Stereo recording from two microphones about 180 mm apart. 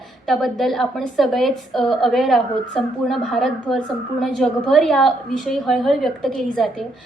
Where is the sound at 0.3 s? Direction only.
Centre (ahead or behind).